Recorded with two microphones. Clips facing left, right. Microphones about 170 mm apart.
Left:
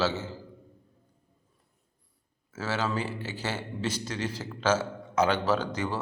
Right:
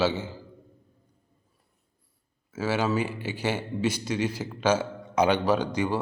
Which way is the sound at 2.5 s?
10° right (ahead or behind).